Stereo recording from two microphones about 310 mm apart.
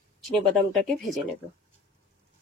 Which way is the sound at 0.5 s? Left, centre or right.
Centre.